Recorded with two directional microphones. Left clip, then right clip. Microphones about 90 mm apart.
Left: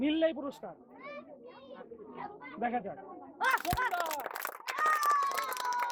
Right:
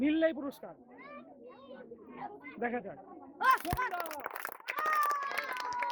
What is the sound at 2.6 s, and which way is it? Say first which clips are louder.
Speech: left 2 dB; 40° right (ahead or behind).